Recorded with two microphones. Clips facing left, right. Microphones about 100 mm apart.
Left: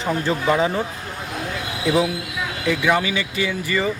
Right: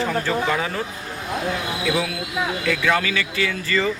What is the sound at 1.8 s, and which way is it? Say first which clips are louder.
Speech: left 6 dB; 20° left (ahead or behind).